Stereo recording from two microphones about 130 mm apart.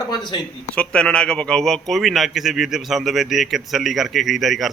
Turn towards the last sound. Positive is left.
turn(degrees=0)  # may be behind; listen again after turning